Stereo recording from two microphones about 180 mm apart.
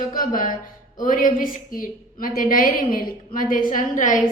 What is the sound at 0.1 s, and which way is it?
A woman's voice, 50° left (ahead or behind).